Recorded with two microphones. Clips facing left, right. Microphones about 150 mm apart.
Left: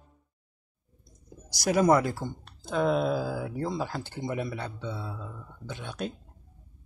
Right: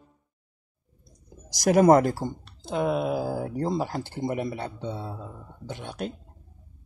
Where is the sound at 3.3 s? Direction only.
40° right (ahead or behind).